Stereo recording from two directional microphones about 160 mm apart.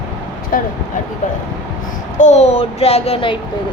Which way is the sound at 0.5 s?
60° left (ahead or behind).